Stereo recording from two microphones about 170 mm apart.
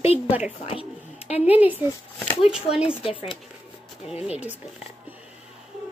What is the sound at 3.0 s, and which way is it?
Speech, 30° left (ahead or behind).